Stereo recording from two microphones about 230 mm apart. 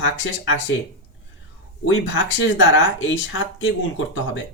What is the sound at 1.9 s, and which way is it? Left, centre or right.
Speech, left.